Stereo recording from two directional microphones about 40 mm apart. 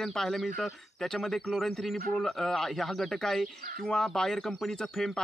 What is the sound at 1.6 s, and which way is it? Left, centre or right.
Bicycle bell, centre.